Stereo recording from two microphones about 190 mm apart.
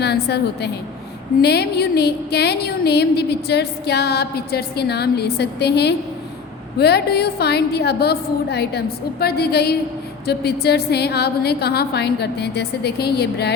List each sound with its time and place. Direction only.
0.0 s a woman's voice: 60° left (ahead or behind)